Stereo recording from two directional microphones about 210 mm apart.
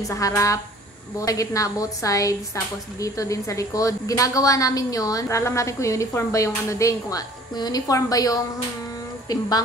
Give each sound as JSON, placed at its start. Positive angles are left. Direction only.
{"t": 0.1, "sound": "a woman's voice", "side_deg": 15}